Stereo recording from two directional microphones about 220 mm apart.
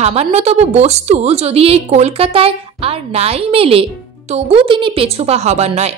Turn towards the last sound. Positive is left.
turn(degrees=-30)  # may be behind; listen again after turning